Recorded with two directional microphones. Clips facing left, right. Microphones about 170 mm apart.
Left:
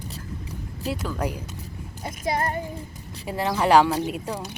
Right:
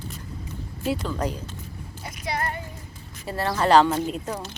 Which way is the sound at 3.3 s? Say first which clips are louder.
Even; 15° left (ahead or behind).